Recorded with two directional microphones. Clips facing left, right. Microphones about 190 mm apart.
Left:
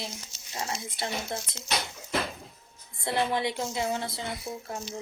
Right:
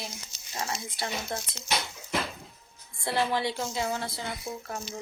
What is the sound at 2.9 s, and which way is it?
A woman's voice, 20° left (ahead or behind).